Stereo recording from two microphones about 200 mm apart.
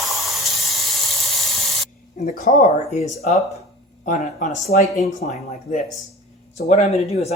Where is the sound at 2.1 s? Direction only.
40° left (ahead or behind).